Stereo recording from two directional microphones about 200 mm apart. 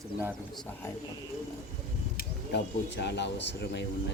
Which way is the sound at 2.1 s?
55° left (ahead or behind).